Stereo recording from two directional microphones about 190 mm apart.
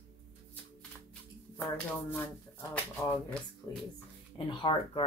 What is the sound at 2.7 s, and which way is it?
Speech, 5° left (ahead or behind).